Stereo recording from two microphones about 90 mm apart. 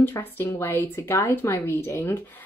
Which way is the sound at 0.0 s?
25° left (ahead or behind).